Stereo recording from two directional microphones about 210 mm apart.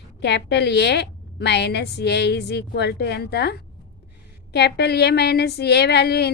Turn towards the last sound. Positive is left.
turn(degrees=50)  # may be behind; listen again after turning